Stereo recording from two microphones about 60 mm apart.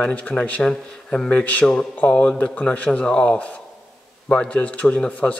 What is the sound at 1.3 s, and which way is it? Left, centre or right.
Speech, left.